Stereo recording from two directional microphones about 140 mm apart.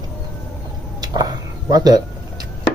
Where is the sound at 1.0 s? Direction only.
30° right (ahead or behind).